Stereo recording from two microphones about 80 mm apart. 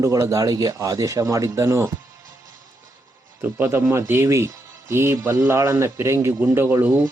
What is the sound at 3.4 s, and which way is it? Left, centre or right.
Speech, right.